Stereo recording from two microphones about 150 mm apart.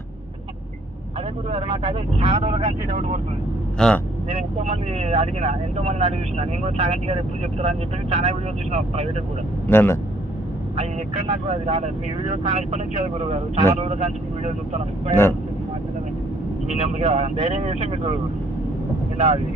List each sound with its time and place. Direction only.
1.5 s speech: 40° right (ahead or behind)
3.8 s speech: 5° left (ahead or behind)
4.3 s speech: 45° right (ahead or behind)
9.6 s speech: 15° left (ahead or behind)
11.4 s speech: 45° right (ahead or behind)
16.6 s speech: 50° right (ahead or behind)
19.1 s speech: 40° right (ahead or behind)